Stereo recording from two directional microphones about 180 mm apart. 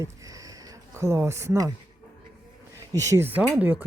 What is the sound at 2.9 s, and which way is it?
Speech, 15° right (ahead or behind).